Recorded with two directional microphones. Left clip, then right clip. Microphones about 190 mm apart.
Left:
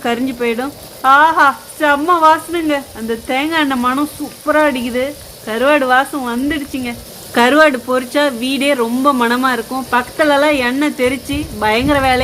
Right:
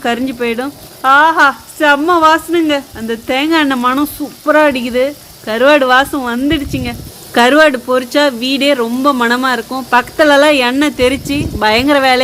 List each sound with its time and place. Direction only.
0.0 s speech: 35° right (ahead or behind)